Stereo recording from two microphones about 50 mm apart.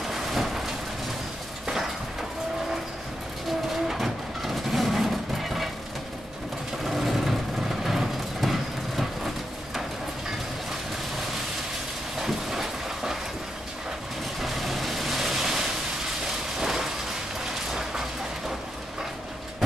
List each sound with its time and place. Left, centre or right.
0.1 s vehicle: centre
3.6 s vehicle: centre
6.8 s vehicle: centre
12.2 s train: centre
14.4 s vehicle: centre
16.3 s a sound: centre